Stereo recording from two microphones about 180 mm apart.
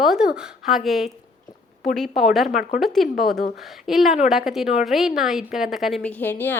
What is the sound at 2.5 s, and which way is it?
Speech, 50° left (ahead or behind).